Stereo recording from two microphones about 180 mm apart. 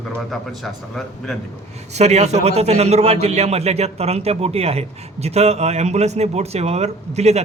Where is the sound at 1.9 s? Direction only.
40° right (ahead or behind).